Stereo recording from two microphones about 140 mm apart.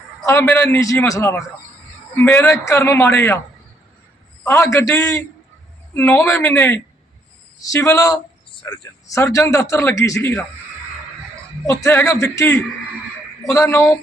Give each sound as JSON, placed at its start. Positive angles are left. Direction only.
{"t": 0.3, "sound": "a man's voice", "side_deg": 15}
{"t": 4.4, "sound": "a man's voice", "side_deg": 20}
{"t": 11.6, "sound": "a man's voice", "side_deg": 20}